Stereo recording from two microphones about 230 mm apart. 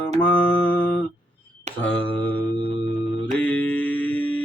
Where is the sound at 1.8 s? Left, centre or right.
Centre.